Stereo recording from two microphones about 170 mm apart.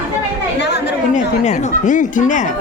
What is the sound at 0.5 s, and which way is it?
Chatter, 80° left.